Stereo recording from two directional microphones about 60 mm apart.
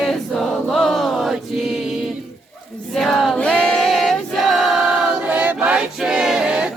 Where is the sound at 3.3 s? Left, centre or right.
Left.